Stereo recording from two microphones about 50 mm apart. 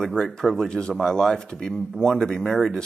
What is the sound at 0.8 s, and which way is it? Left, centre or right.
Speech, centre.